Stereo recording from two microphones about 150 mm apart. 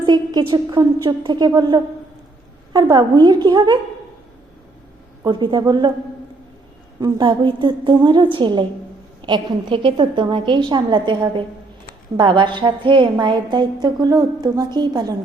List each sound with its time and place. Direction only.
0.0 s a woman's voice: 30° right (ahead or behind)
5.2 s a woman's voice: 30° right (ahead or behind)
7.0 s a woman's voice: 30° right (ahead or behind)